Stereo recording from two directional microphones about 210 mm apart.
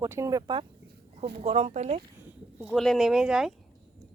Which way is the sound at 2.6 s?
Centre (ahead or behind).